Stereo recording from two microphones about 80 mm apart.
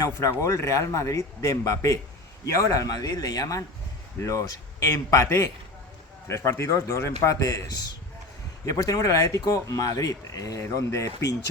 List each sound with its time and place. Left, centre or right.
0.2 s a man's voice: left
4.2 s a man's voice: left
8.6 s speech: left